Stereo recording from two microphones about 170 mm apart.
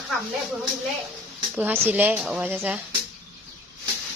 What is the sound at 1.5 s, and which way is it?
A woman's voice, 10° right (ahead or behind).